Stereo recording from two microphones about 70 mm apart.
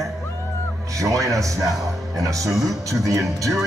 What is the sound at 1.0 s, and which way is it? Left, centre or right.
Music, right.